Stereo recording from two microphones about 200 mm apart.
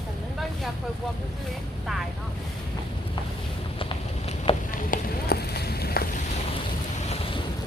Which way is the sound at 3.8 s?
30° left (ahead or behind).